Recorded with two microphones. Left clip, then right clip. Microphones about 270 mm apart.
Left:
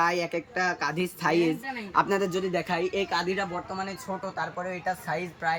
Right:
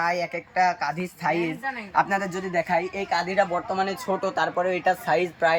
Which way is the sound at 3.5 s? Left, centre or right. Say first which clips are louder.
Right 8 dB; right.